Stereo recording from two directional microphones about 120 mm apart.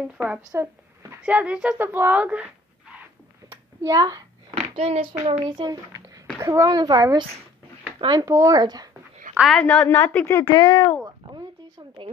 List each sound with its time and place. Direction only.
0.0 s speech: 10° right (ahead or behind)
0.5 s a sound: 25° right (ahead or behind)
1.2 s speech: 10° right (ahead or behind)
3.4 s a sound: 30° right (ahead or behind)
4.6 s a child's voice: 60° right (ahead or behind)
5.4 s a child's voice: 35° right (ahead or behind)
6.4 s a child's voice: 25° right (ahead or behind)
8.3 s speech: 25° right (ahead or behind)
8.5 s a child's voice: 35° right (ahead or behind)
9.4 s a woman's voice: 5° left (ahead or behind)
9.8 s a woman's voice: 15° left (ahead or behind)
10.5 s speech: 40° left (ahead or behind)
11.1 s a sound: 35° right (ahead or behind)